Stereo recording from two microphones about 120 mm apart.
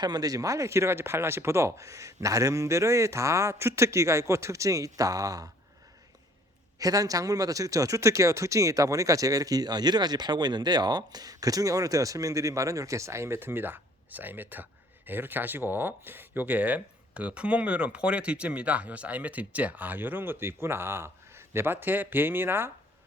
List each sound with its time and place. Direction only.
0.0 s speech: 35° right (ahead or behind)
6.7 s speech: 30° right (ahead or behind)